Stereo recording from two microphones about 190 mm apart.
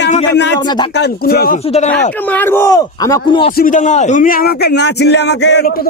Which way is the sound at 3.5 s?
45° left (ahead or behind).